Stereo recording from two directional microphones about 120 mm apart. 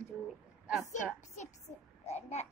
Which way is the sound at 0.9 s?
75° left (ahead or behind).